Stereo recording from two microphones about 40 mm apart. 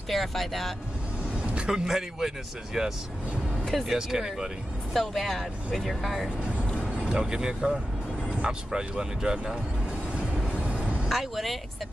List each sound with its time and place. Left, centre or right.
0.1 s speech: centre
1.7 s speech: centre
4.9 s speech: centre
7.1 s speech: centre
10.1 s vehicle: right
11.1 s speech: centre